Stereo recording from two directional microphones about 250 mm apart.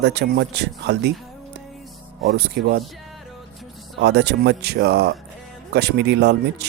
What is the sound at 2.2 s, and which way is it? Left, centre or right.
Speech, right.